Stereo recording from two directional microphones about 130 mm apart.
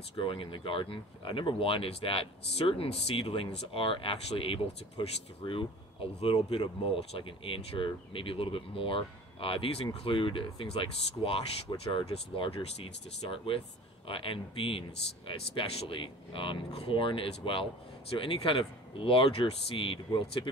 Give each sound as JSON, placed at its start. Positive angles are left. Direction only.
{"t": 0.1, "sound": "speech", "side_deg": 40}